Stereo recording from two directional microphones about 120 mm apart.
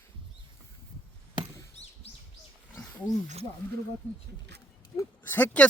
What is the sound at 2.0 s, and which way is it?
Bird, 55° left (ahead or behind).